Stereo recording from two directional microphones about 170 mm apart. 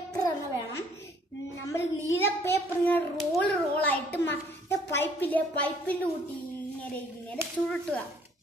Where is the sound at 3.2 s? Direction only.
5° left (ahead or behind).